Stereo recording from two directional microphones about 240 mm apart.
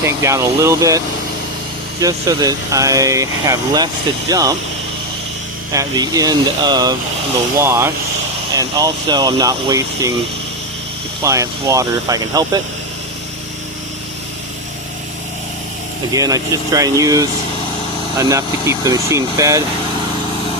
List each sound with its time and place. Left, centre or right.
0.0 s speech: centre
5.7 s speech: centre
11.2 s speech: centre
16.1 s speech: centre